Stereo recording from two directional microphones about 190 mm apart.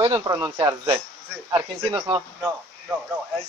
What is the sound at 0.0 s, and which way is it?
Speech, 15° right (ahead or behind).